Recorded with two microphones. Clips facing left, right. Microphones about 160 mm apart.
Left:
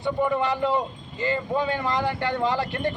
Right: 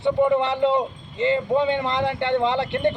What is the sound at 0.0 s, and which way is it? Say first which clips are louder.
A man's voice: right 5 dB; 25° right (ahead or behind).